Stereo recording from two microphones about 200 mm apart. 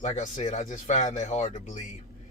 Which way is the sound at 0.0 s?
40° left (ahead or behind).